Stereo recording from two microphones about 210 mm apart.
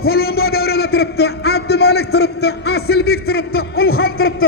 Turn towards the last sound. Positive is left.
turn(degrees=45)  # may be behind; listen again after turning